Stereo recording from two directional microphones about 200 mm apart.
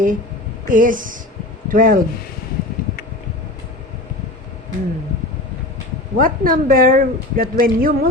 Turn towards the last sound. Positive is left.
turn(degrees=-45)  # may be behind; listen again after turning